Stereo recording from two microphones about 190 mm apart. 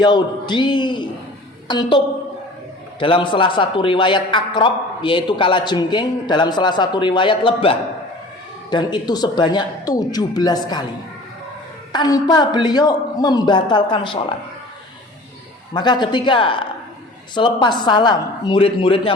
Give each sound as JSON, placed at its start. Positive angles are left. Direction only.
{"t": 0.0, "sound": "a man's voice", "side_deg": 25}
{"t": 3.0, "sound": "a man's voice", "side_deg": 25}
{"t": 11.9, "sound": "a man's voice", "side_deg": 20}
{"t": 15.7, "sound": "a man's voice", "side_deg": 25}